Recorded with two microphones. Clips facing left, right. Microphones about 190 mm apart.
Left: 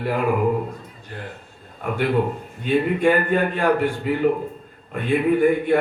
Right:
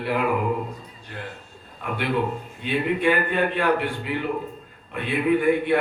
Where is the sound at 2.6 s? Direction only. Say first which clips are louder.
Left 4 dB; 45° left (ahead or behind).